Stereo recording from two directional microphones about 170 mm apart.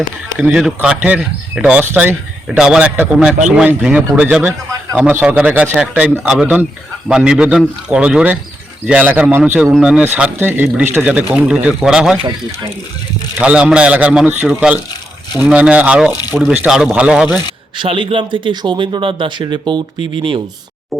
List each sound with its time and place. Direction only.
0.3 s speech: 5° right (ahead or behind)
13.4 s speech: 5° right (ahead or behind)
17.7 s speech: 30° right (ahead or behind)